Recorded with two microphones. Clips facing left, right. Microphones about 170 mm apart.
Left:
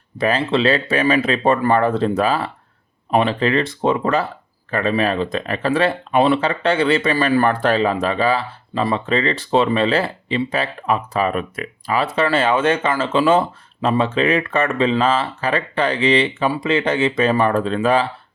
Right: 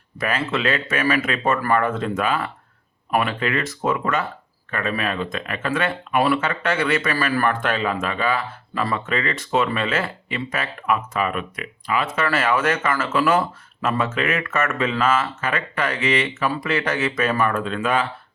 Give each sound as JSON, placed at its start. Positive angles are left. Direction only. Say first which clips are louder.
{"t": 0.2, "sound": "speech", "louder": "left 6 dB", "side_deg": 30}